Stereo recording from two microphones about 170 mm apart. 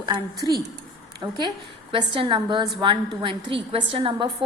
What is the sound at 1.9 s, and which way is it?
A woman's voice, 30° right (ahead or behind).